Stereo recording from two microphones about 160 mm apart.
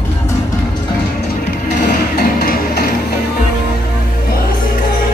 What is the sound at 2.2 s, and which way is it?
Music, 80° left.